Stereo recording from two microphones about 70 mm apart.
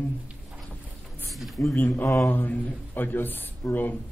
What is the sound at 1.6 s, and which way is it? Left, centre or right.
Speech, left.